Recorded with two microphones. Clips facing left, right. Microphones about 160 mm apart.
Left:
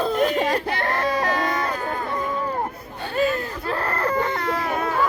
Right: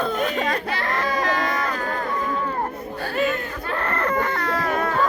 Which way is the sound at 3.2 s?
35° left (ahead or behind).